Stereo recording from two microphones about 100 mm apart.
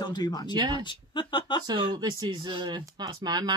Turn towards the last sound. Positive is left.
turn(degrees=-45)  # may be behind; listen again after turning